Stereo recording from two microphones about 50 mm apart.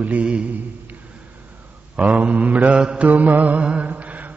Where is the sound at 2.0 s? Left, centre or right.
Right.